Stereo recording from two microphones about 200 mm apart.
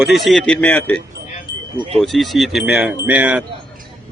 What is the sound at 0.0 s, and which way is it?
Speech, centre (ahead or behind).